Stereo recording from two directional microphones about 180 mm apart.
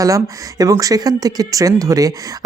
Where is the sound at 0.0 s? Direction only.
20° right (ahead or behind).